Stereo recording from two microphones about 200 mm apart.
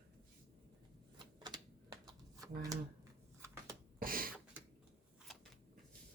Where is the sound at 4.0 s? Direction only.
45° right (ahead or behind).